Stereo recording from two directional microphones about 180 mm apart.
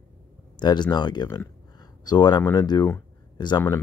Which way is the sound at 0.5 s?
25° left (ahead or behind).